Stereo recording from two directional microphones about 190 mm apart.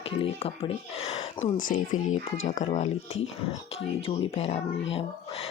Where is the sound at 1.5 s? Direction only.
45° left (ahead or behind).